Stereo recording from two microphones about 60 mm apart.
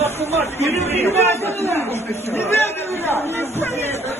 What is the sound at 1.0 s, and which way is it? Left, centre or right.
A man's voice, left.